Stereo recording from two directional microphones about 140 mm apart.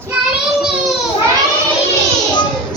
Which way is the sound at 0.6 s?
5° right (ahead or behind).